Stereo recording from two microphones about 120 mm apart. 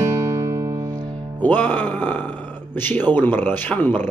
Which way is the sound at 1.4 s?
15° left (ahead or behind).